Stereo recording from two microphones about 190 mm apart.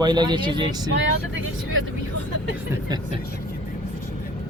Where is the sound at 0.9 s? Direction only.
85° right.